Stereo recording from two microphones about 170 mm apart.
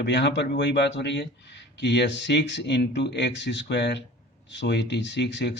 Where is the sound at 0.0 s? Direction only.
85° left.